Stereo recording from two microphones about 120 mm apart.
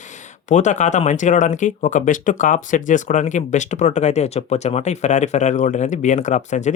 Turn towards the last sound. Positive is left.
turn(degrees=90)